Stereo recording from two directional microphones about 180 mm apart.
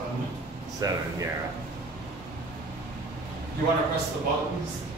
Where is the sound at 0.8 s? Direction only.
20° right (ahead or behind).